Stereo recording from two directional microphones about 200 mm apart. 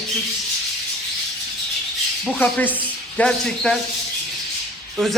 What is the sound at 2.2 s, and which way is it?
A man's voice, 5° left (ahead or behind).